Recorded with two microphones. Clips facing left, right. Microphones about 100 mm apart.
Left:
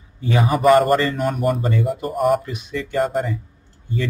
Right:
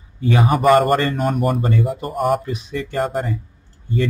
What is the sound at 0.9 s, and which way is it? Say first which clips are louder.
Speech: right 1 dB; 45° right (ahead or behind).